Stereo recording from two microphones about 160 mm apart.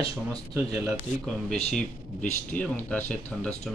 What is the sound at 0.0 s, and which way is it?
Speech, 20° right (ahead or behind).